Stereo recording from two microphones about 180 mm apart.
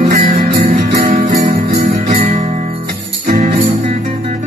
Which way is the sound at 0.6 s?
60° right (ahead or behind).